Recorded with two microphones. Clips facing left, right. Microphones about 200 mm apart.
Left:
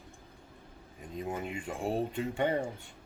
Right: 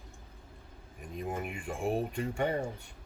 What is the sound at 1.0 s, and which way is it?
Speech, 20° left (ahead or behind).